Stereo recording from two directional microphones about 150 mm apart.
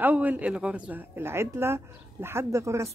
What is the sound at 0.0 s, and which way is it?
Speech, 10° right (ahead or behind).